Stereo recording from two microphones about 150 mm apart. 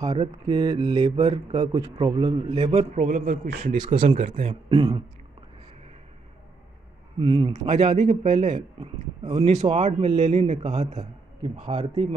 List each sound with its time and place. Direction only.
0.2 s speech: 35° right (ahead or behind); by 3.7 s 60° right (ahead or behind)
3.8 s speech: 35° right (ahead or behind)
4.1 s a man's voice: 55° right (ahead or behind)
4.7 s speech: 35° right (ahead or behind)
7.2 s speech: 35° right (ahead or behind)
7.7 s a man's voice: 50° right (ahead or behind)